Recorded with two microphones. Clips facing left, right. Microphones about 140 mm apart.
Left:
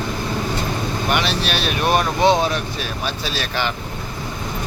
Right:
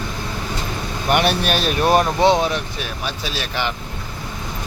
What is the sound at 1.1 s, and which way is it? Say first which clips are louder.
Speech: right 5 dB; 50° right (ahead or behind).